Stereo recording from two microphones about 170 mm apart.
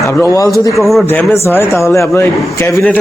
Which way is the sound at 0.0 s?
15° left (ahead or behind).